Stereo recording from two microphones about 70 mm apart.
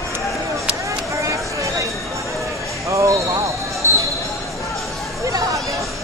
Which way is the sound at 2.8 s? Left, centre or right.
Right.